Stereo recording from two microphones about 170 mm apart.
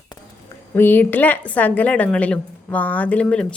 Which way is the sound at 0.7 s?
10° left (ahead or behind).